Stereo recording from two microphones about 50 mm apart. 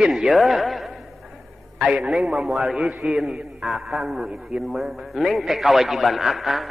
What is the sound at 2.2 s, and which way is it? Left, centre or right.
A man's voice, centre.